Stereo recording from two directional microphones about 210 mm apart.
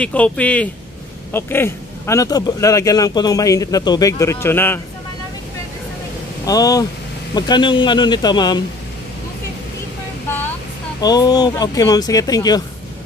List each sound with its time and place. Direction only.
0.0 s a man's voice: 5° left (ahead or behind)
6.4 s a man's voice: 15° left (ahead or behind)
11.0 s speech: 20° left (ahead or behind)